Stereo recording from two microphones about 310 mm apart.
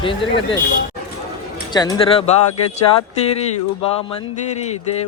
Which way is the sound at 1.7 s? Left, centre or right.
Centre.